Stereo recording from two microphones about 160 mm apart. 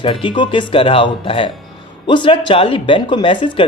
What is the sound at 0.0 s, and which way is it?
Speech, 35° left (ahead or behind).